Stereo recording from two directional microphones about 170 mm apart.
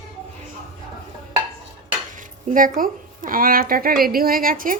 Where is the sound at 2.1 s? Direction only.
50° right (ahead or behind).